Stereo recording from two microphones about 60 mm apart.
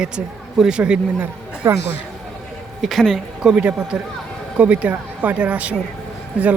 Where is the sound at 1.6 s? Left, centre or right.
Right.